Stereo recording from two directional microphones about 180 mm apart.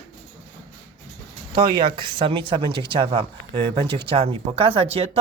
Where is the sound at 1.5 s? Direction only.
25° right (ahead or behind).